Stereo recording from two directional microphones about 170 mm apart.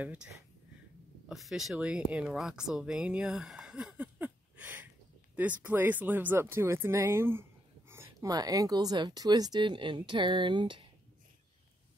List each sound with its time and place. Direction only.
0.0 s speech: 10° right (ahead or behind)
1.3 s speech: centre (ahead or behind); by 10.9 s 30° right (ahead or behind)